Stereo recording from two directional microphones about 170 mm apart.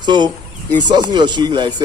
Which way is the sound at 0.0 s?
25° right (ahead or behind).